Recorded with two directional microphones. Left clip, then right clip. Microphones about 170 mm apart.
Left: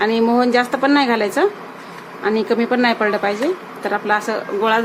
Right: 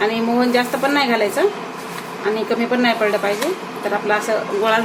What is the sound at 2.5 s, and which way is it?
Speech, 50° left (ahead or behind).